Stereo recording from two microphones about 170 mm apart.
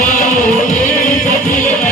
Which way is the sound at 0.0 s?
45° left (ahead or behind).